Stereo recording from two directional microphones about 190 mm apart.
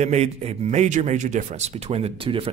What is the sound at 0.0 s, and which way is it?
Speech, 35° right (ahead or behind).